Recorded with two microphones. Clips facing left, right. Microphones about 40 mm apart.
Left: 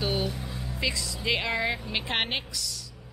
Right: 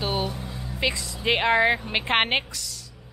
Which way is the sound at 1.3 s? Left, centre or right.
Right.